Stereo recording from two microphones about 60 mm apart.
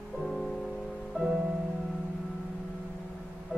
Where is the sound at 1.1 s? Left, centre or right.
Centre.